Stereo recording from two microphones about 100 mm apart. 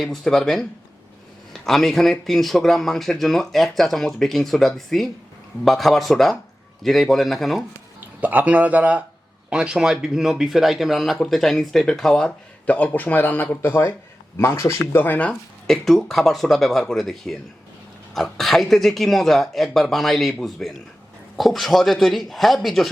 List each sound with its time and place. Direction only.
0.0 s speech: 5° left (ahead or behind)
8.2 s speech: 15° right (ahead or behind); by 15.3 s 20° left (ahead or behind)
15.3 s speech: 5° left (ahead or behind)